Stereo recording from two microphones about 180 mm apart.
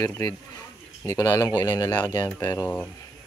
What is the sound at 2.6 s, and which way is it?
Speech, 10° left (ahead or behind).